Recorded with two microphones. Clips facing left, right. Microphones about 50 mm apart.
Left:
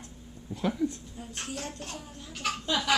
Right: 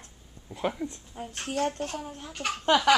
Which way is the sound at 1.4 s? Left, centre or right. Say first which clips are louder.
Right 11 dB; right.